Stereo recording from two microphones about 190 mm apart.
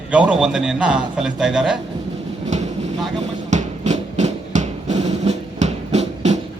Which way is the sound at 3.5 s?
40° right (ahead or behind).